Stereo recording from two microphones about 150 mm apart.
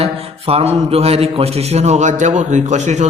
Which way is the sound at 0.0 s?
40° right (ahead or behind).